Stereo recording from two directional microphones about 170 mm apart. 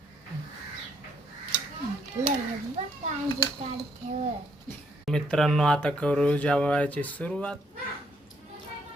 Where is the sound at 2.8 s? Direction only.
40° right (ahead or behind).